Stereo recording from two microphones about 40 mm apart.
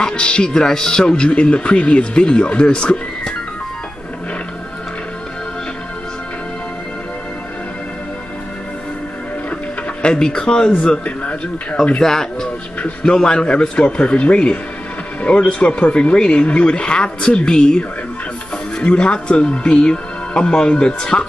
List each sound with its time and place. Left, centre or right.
0.0 s speech: left
1.1 s speech: left
10.0 s speech: left
12.0 s speech: centre